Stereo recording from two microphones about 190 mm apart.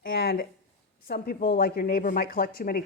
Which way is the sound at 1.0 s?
55° left (ahead or behind).